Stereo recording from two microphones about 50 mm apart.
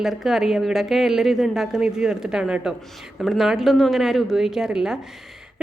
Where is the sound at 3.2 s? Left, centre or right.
Centre.